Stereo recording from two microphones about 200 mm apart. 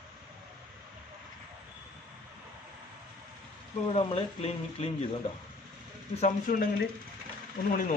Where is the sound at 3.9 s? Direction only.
30° left (ahead or behind).